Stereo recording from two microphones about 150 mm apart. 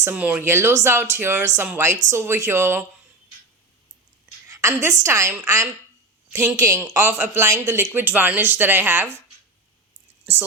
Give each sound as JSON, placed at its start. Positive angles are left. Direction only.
{"t": 0.0, "sound": "speech", "side_deg": -10}
{"t": 4.4, "sound": "speech", "side_deg": -20}